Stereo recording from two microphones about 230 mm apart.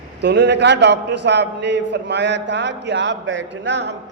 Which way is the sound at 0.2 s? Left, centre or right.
Right.